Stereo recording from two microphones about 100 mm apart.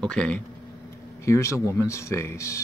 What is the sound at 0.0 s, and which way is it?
Speech, 10° left (ahead or behind).